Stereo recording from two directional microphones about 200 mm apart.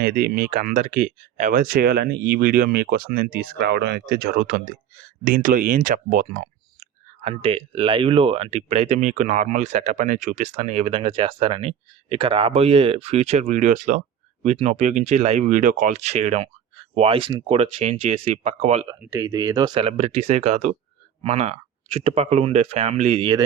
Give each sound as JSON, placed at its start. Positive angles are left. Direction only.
{"t": 0.0, "sound": "speech", "side_deg": -50}
{"t": 18.9, "sound": "speech", "side_deg": -10}